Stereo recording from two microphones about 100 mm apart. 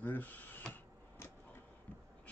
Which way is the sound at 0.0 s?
20° left (ahead or behind).